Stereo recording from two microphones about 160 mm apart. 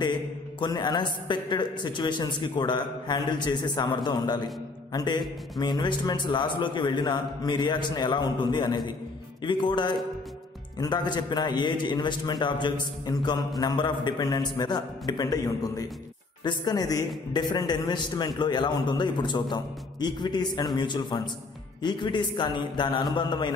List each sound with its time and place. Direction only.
0.0 s a man's voice: 30° left (ahead or behind)